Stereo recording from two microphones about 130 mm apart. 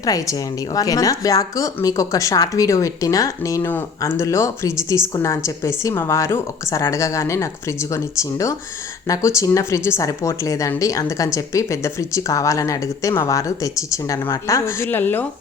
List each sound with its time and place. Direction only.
0.0 s a woman's voice: 25° left (ahead or behind)